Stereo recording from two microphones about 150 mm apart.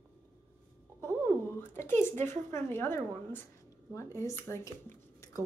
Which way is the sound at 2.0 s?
15° left (ahead or behind).